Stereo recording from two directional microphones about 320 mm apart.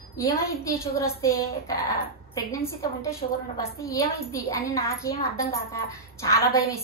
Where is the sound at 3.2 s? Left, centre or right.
Left.